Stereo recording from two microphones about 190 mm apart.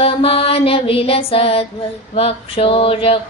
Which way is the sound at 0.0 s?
30° left (ahead or behind).